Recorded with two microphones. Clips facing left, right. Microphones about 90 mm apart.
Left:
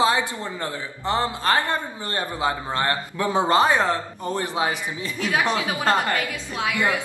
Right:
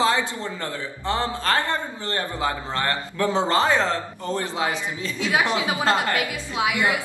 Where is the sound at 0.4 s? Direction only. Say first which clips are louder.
Even; 20° left (ahead or behind).